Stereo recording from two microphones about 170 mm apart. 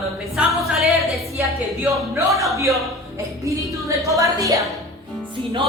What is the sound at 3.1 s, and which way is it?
Music, 20° right (ahead or behind).